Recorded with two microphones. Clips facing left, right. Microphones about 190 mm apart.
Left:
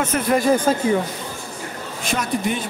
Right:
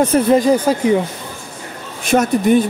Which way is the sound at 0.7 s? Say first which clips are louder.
Right 3 dB; 10° right (ahead or behind).